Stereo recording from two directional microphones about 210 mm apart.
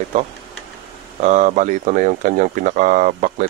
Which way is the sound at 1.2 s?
35° right (ahead or behind).